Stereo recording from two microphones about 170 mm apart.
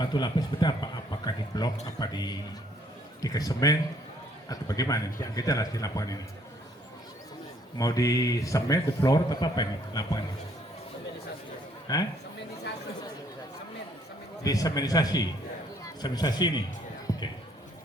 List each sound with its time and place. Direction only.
0.0 s speech: 25° left (ahead or behind)
7.8 s speech: 20° left (ahead or behind)
11.9 s speech: 25° left (ahead or behind)
14.4 s speech: 20° left (ahead or behind)